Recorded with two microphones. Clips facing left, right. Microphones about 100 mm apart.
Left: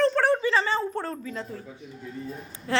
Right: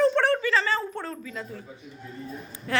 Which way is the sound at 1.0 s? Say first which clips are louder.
Left 3 dB; 35° left (ahead or behind).